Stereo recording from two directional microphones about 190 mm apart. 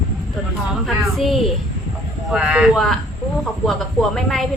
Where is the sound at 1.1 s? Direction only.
Centre (ahead or behind).